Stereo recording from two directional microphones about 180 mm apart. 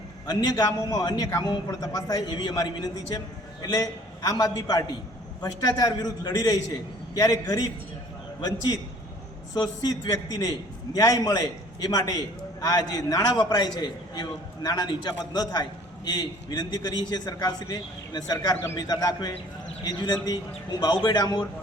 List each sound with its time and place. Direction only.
0.3 s a man's voice: 20° left (ahead or behind)